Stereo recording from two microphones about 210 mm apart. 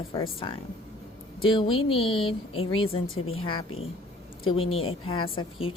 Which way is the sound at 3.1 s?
80° left.